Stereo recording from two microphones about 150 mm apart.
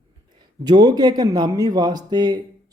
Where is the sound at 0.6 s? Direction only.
25° right (ahead or behind).